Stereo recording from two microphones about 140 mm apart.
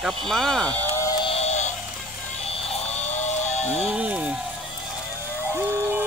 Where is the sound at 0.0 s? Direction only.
Centre (ahead or behind).